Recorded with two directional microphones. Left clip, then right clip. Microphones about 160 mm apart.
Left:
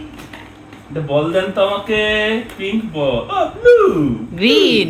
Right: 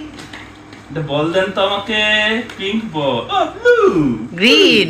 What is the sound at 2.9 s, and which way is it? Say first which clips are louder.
Speech: right 1 dB; 25° left (ahead or behind).